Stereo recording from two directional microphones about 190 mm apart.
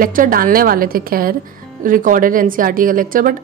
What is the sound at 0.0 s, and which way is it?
A woman's voice, 45° right (ahead or behind).